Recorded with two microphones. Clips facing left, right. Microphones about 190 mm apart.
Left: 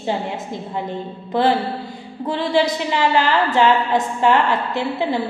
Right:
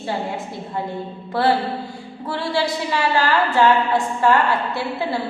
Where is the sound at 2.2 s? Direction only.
20° left (ahead or behind).